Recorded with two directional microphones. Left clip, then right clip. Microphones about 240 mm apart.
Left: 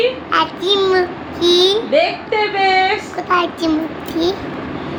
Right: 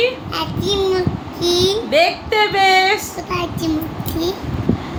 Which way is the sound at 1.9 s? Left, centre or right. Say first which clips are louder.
Even; right.